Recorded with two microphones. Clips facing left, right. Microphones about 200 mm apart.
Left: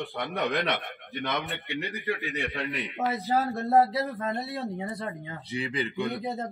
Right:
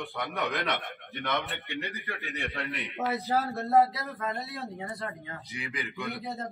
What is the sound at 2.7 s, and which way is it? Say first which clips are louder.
Speech: right 1 dB; centre (ahead or behind).